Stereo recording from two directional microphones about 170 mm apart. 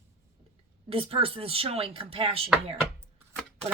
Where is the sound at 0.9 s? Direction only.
35° right (ahead or behind).